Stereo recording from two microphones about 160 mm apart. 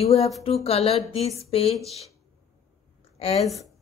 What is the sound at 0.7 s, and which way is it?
Speech, 40° left (ahead or behind).